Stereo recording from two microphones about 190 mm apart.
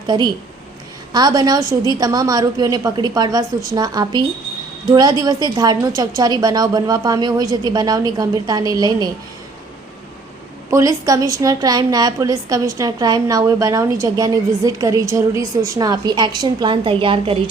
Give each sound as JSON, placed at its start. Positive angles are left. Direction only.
{"t": 0.1, "sound": "a woman's voice", "side_deg": -25}
{"t": 10.7, "sound": "a woman's voice", "side_deg": -15}